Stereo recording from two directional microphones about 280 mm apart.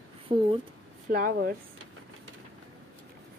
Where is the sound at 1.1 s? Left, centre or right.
Right.